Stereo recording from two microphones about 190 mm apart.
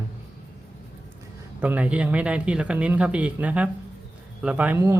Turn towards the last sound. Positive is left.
turn(degrees=-10)  # may be behind; listen again after turning